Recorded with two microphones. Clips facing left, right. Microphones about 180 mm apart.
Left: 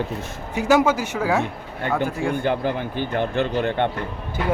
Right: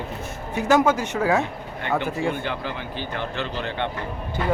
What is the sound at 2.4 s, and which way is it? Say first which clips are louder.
A man's voice: left 7 dB; 50° left (ahead or behind).